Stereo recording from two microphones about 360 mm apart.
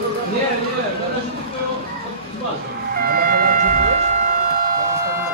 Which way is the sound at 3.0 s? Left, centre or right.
Right.